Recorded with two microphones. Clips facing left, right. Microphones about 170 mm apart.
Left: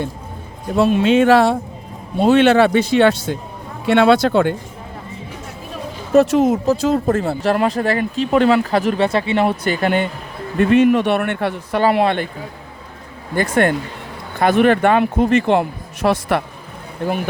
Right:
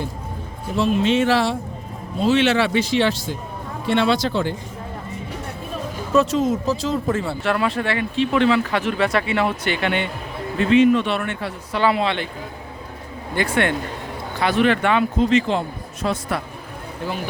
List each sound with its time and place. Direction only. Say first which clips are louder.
0.8 s speech: left 5 dB; 60° left (ahead or behind)
6.1 s speech: left 5 dB; 65° left (ahead or behind)
7.2 s speech: left 4 dB; 40° left (ahead or behind)
10.6 s speech: left 2 dB; 55° left (ahead or behind)
13.3 s speech: left 4 dB; 45° left (ahead or behind); by 16.4 s 70° left (ahead or behind)